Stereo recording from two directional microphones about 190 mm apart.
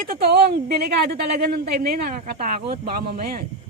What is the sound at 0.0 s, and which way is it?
A woman's voice, 50° right (ahead or behind).